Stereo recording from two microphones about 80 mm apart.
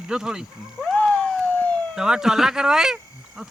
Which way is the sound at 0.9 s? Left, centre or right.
Centre.